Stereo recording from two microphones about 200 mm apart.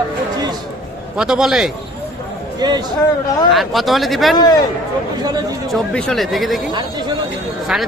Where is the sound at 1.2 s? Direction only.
5° right (ahead or behind).